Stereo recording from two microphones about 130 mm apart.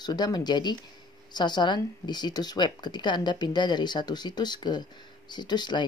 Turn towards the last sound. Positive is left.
turn(degrees=35)  # may be behind; listen again after turning